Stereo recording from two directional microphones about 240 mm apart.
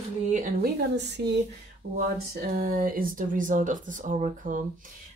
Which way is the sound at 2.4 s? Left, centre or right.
Right.